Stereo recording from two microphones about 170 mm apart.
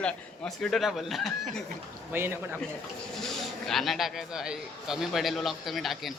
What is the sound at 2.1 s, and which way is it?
Speech, 15° right (ahead or behind).